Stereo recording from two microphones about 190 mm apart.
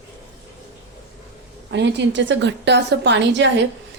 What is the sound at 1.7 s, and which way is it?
A woman's voice, 65° right (ahead or behind).